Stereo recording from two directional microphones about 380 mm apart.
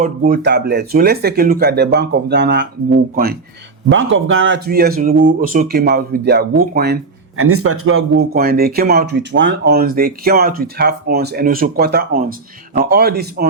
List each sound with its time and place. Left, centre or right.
0.0 s speech: right
3.9 s speech: right